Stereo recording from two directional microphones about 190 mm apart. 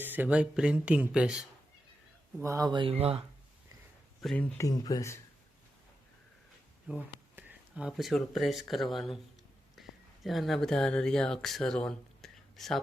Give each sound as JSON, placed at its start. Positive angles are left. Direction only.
{"t": 0.0, "sound": "speech", "side_deg": -10}
{"t": 2.4, "sound": "speech", "side_deg": -15}
{"t": 4.2, "sound": "speech", "side_deg": 5}
{"t": 6.8, "sound": "speech", "side_deg": -10}
{"t": 9.8, "sound": "a sound", "side_deg": 0}
{"t": 10.2, "sound": "speech", "side_deg": 0}